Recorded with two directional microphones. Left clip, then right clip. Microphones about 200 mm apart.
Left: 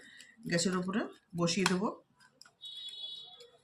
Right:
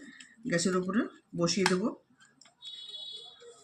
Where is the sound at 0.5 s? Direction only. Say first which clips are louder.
Right 3 dB; 50° left (ahead or behind).